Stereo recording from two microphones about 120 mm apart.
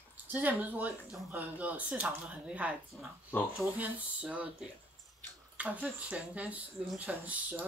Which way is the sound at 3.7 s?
10° right (ahead or behind).